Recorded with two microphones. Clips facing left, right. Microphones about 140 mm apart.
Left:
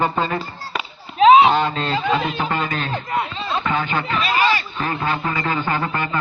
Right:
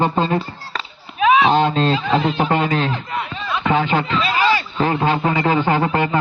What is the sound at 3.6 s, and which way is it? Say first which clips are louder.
A man's voice: right 8 dB; 90° right.